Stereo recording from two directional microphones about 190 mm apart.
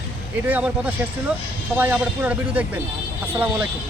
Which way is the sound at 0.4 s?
10° right (ahead or behind).